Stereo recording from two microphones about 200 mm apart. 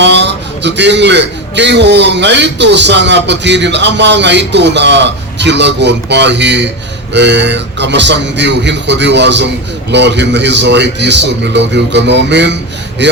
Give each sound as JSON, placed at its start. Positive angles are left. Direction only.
{"t": 0.0, "sound": "a man's voice", "side_deg": -60}